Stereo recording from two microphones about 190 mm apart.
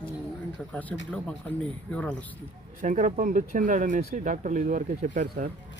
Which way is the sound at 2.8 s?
40° right (ahead or behind).